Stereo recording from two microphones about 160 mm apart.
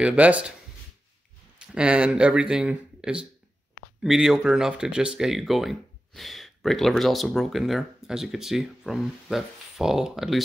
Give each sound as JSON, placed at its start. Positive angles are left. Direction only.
{"t": 0.0, "sound": "speech", "side_deg": -10}
{"t": 1.7, "sound": "speech", "side_deg": -5}